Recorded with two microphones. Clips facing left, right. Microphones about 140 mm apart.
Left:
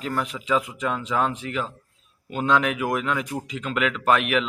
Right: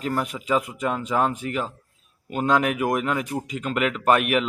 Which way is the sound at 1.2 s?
45° right (ahead or behind).